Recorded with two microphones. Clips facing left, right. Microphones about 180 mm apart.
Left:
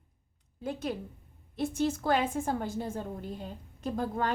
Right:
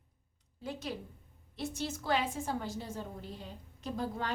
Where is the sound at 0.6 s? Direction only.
50° left (ahead or behind).